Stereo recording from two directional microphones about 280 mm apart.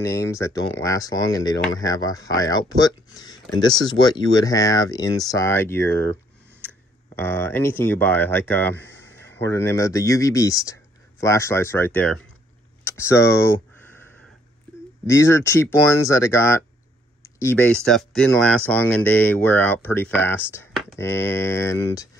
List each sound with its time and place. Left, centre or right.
0.0 s speech: centre
7.2 s speech: centre
15.0 s speech: centre